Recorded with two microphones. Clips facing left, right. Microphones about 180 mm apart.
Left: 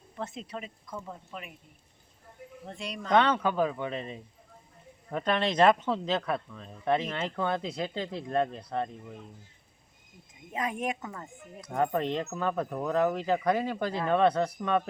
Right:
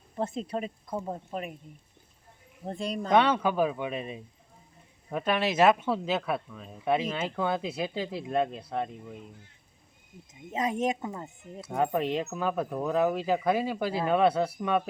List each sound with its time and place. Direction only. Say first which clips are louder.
0.2 s speech: right 7 dB; 40° right (ahead or behind)
2.6 s speech: right 7 dB; 35° right (ahead or behind)
3.1 s speech: right 1 dB; 10° right (ahead or behind)
10.5 s speech: right 4 dB; 25° right (ahead or behind)
11.6 s speech: right 1 dB; 10° right (ahead or behind)